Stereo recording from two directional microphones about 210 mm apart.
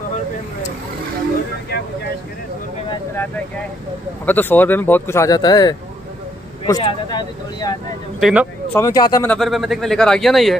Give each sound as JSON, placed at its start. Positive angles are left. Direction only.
{"t": 4.3, "sound": "a man's voice", "side_deg": 10}
{"t": 8.2, "sound": "speech", "side_deg": -5}
{"t": 8.7, "sound": "a man's voice", "side_deg": 15}
{"t": 9.3, "sound": "speech", "side_deg": 0}